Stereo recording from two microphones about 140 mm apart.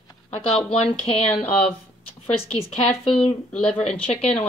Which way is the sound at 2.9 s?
45° left (ahead or behind).